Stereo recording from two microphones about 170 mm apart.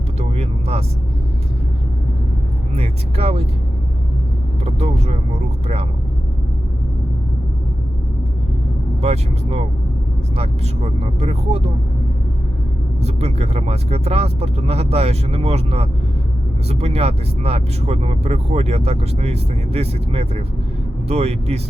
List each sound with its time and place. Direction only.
0.2 s vehicle: 40° right (ahead or behind)
2.7 s vehicle: 35° right (ahead or behind)
4.6 s vehicle: 35° right (ahead or behind)
9.0 s speech: 35° right (ahead or behind)
13.0 s speech: 40° right (ahead or behind)